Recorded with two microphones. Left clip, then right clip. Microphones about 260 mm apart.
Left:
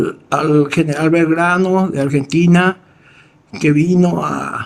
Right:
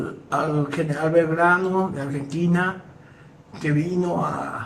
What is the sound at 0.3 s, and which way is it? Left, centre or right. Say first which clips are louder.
Speech: left 9 dB; left.